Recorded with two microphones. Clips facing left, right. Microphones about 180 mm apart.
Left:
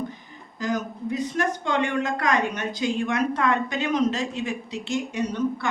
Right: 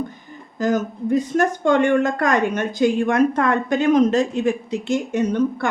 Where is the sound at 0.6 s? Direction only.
45° right (ahead or behind).